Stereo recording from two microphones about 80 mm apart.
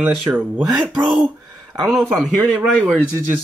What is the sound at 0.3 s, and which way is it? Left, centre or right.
Speech, right.